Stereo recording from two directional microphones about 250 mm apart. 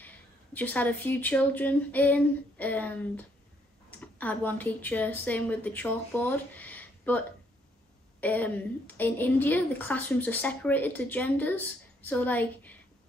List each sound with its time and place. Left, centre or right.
0.0 s a woman's voice: centre